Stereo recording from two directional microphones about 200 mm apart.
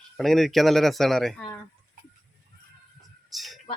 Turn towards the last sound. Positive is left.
turn(degrees=0)  # may be behind; listen again after turning